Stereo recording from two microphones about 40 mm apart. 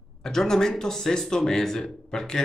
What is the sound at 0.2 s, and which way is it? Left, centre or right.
Speech, centre.